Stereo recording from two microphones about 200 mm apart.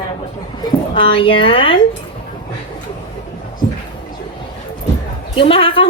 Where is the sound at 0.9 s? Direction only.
25° left (ahead or behind).